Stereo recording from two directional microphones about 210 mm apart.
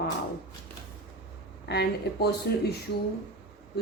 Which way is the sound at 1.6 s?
50° left (ahead or behind).